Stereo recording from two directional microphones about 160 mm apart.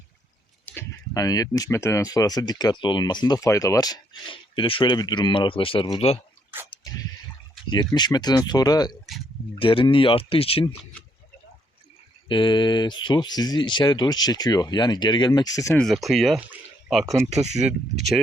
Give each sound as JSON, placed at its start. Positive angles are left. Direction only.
{"t": 0.6, "sound": "speech", "side_deg": 15}
{"t": 6.7, "sound": "drip", "side_deg": 25}
{"t": 7.7, "sound": "speech", "side_deg": 25}
{"t": 12.3, "sound": "speech", "side_deg": 30}
{"t": 15.8, "sound": "speech", "side_deg": 0}
{"t": 17.4, "sound": "speech", "side_deg": -45}